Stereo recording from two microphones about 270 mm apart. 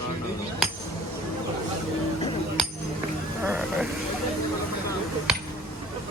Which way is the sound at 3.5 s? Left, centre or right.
Centre.